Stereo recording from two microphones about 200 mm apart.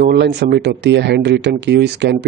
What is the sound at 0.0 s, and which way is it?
Speech, 55° right (ahead or behind).